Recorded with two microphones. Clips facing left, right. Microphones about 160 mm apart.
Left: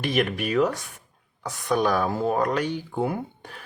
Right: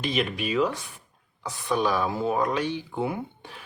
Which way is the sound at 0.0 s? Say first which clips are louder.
Left 3 dB; 55° left (ahead or behind).